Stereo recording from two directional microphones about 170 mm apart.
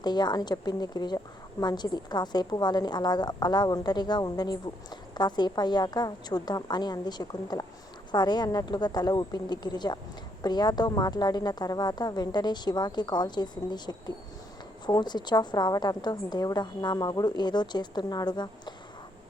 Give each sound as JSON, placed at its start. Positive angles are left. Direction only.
{"t": 0.0, "sound": "a woman's voice", "side_deg": 25}